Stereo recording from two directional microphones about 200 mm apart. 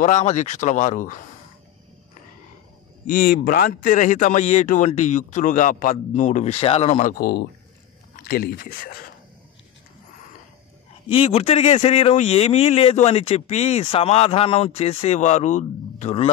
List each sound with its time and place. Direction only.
0.0 s speech: 35° left (ahead or behind)
3.1 s speech: 45° left (ahead or behind)
11.1 s speech: 30° left (ahead or behind)